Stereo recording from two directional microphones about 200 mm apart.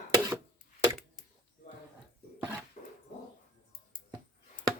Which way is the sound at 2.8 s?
35° left (ahead or behind).